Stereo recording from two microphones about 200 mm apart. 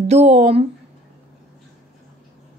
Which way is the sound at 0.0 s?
35° right (ahead or behind).